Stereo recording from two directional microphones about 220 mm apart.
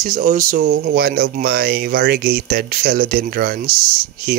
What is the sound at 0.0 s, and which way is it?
Speech, 40° right (ahead or behind).